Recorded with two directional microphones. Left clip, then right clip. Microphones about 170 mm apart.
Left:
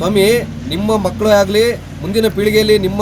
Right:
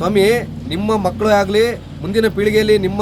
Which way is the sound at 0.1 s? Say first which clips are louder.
Left 2 dB; 30° right (ahead or behind).